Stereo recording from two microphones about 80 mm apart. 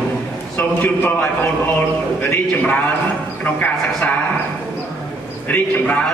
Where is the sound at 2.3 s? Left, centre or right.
Left.